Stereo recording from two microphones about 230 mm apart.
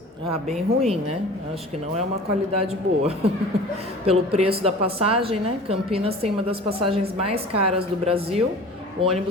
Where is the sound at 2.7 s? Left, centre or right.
Right.